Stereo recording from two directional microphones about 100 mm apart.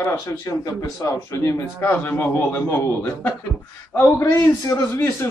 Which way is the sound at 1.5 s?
20° left (ahead or behind).